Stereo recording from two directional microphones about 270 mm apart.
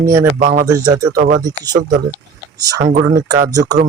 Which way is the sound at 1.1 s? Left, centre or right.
Right.